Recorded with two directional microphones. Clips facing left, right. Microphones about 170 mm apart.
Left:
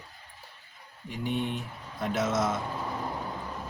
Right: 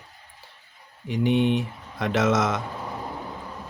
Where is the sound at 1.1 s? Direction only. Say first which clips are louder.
Right 10 dB; 80° right.